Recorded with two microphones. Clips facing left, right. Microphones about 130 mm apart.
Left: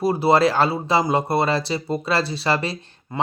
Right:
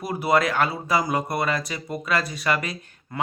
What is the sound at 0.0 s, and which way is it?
Speech, 30° left (ahead or behind).